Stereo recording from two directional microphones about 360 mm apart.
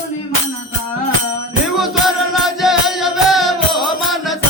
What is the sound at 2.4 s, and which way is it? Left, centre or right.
Music, centre.